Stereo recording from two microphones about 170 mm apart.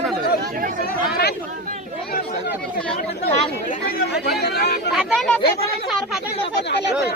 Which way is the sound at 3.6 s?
65° left (ahead or behind).